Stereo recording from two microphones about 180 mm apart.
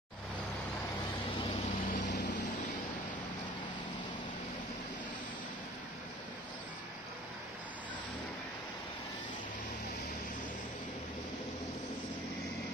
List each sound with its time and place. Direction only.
1.4 s vehicle: 35° left (ahead or behind)
1.9 s vehicle: 45° left (ahead or behind)